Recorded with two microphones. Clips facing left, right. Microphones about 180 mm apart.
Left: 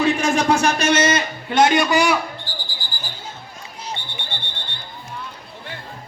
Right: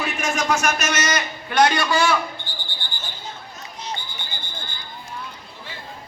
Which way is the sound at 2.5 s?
35° left (ahead or behind).